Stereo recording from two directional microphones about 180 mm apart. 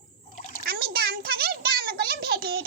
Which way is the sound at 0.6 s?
60° right (ahead or behind).